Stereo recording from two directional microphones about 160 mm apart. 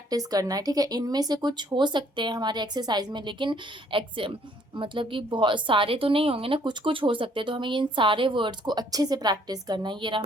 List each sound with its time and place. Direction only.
0.1 s a woman's voice: 25° right (ahead or behind)